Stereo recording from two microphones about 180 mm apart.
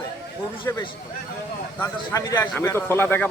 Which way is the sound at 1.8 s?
10° left (ahead or behind).